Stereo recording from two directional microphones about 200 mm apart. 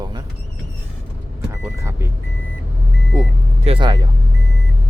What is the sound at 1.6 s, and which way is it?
Speech, 15° right (ahead or behind).